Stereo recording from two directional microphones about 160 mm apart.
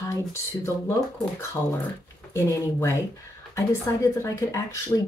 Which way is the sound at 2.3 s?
20° left (ahead or behind).